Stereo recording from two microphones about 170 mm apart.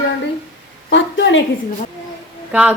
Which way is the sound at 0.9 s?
90° left.